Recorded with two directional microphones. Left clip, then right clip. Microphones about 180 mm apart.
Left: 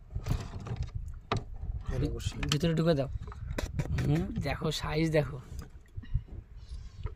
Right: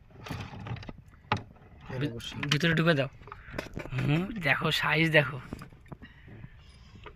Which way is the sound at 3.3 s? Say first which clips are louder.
Right 4 dB; 30° right (ahead or behind).